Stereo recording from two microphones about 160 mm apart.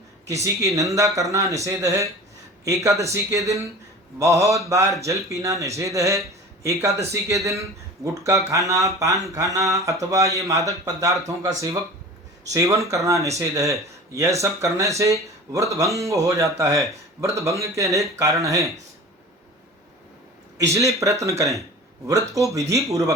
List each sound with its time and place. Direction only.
0.4 s speech: 20° right (ahead or behind)
20.6 s speech: 20° right (ahead or behind)